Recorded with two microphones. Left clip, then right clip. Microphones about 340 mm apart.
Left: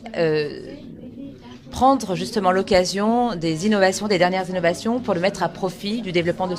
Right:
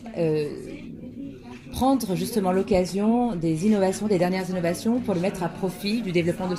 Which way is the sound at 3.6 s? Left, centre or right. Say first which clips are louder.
Left 6 dB; left.